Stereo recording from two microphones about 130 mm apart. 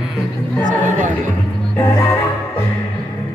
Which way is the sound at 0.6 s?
70° right (ahead or behind).